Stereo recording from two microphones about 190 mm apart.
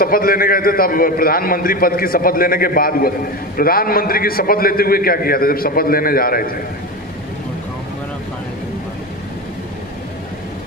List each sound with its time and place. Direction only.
0.0 s a man's voice: 50° left (ahead or behind)